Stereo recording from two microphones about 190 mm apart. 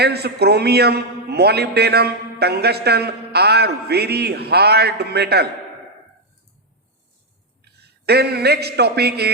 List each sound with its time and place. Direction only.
0.0 s a man's voice: 60° right (ahead or behind)
7.6 s a man's voice: 60° right (ahead or behind)